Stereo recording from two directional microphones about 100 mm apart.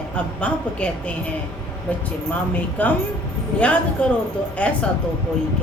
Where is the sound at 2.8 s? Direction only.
15° left (ahead or behind).